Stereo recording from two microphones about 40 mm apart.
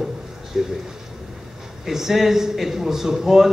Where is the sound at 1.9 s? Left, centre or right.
Centre.